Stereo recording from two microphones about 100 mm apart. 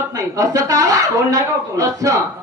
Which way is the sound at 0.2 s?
35° right (ahead or behind).